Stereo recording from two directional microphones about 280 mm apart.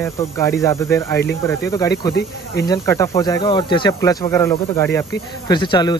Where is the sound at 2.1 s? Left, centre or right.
Left.